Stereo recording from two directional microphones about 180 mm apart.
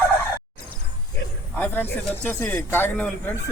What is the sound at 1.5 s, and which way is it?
Speech, 10° left (ahead or behind).